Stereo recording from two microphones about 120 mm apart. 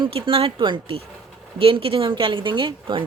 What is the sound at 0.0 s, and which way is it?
Speech, 50° right (ahead or behind).